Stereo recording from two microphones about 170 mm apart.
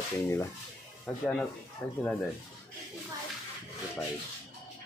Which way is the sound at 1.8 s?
10° left (ahead or behind).